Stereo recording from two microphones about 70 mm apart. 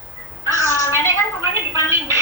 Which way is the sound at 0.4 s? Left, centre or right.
Right.